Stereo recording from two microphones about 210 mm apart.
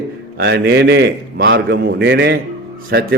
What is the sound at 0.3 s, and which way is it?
A man's voice, 50° right (ahead or behind).